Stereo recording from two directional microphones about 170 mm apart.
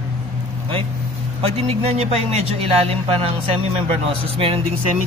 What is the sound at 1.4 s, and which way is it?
Speech, 35° right (ahead or behind).